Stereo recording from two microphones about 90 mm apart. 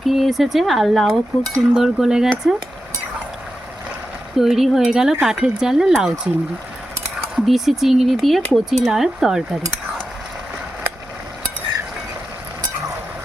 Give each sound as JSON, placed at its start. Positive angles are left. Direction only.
{"t": 0.0, "sound": "speech", "side_deg": 0}
{"t": 4.4, "sound": "speech", "side_deg": -5}
{"t": 7.3, "sound": "speech", "side_deg": -5}